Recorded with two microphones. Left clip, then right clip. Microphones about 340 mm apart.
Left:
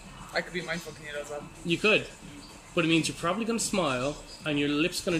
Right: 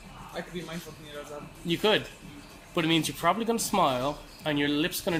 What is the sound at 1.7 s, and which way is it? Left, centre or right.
Speech, centre.